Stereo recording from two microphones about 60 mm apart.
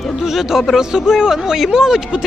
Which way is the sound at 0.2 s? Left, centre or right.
Centre.